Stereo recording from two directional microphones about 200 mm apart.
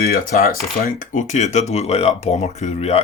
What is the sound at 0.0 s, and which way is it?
Speech, 50° left (ahead or behind).